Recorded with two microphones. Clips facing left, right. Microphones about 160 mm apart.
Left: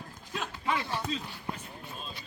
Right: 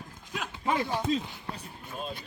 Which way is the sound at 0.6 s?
40° right (ahead or behind).